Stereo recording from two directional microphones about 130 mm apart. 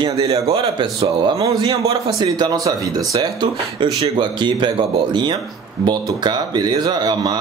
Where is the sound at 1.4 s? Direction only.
30° right (ahead or behind).